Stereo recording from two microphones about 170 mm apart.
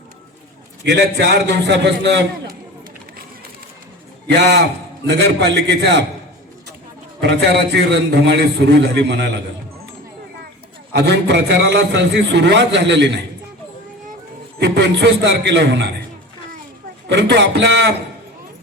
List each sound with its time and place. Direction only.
0.9 s a man's voice: 80° right
5.0 s a man's voice: 90° right
7.2 s a man's voice: 85° right
10.9 s a man's voice: 80° right
14.6 s a man's voice: 90° right
17.1 s a man's voice: 90° right